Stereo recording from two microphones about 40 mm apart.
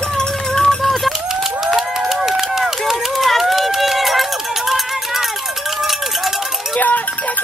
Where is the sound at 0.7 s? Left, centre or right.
Centre.